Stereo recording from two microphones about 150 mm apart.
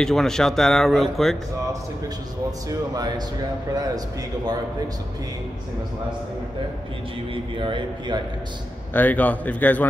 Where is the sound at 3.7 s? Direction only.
25° right (ahead or behind).